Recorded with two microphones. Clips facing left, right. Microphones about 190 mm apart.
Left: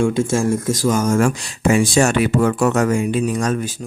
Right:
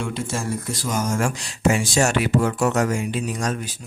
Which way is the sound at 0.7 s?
50° left (ahead or behind).